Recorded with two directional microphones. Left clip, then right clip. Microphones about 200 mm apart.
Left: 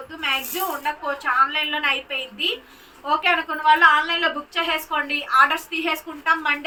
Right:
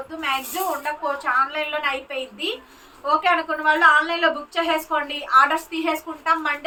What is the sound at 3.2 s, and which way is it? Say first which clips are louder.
A woman's voice: even; 35° right (ahead or behind).